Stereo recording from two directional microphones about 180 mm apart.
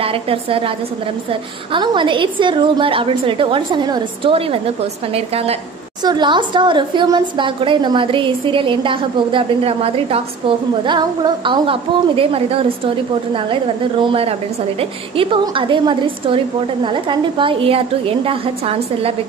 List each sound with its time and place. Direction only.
0.0 s a woman's voice: 30° right (ahead or behind)